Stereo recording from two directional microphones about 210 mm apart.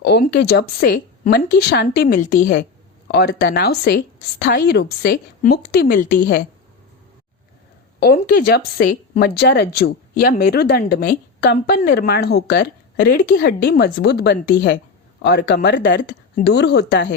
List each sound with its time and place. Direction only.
0.0 s speech: 50° left (ahead or behind)
7.9 s speech: 50° left (ahead or behind)